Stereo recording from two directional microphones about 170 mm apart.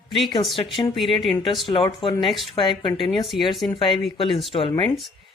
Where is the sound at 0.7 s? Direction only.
30° left (ahead or behind).